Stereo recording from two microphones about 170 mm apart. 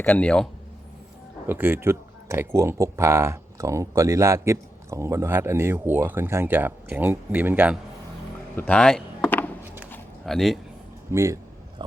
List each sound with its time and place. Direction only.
0.0 s a man's voice: 10° left (ahead or behind)
1.5 s speech: 10° right (ahead or behind)
8.5 s a sound: 10° left (ahead or behind)
11.1 s speech: 15° right (ahead or behind)